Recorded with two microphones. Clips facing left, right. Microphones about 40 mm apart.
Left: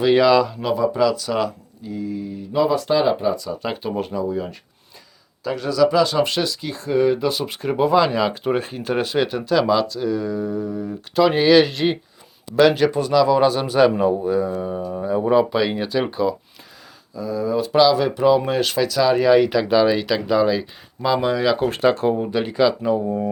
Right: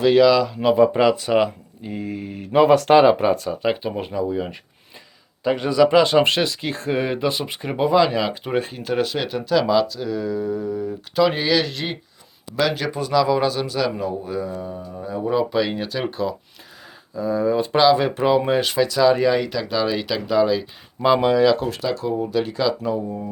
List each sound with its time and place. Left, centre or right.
0.0 s speech: centre
0.8 s speech: right
1.9 s speech: right
3.5 s speech: centre
5.4 s speech: right
7.0 s speech: right; by 13.7 s centre
13.7 s speech: left
14.3 s speech: centre
17.2 s speech: right; by 19.4 s centre
19.4 s speech: centre
21.7 s speech: left
22.1 s speech: left